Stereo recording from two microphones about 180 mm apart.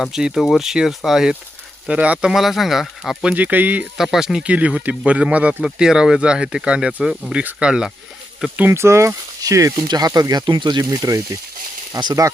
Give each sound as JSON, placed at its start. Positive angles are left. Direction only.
{"t": 0.0, "sound": "speech", "side_deg": -5}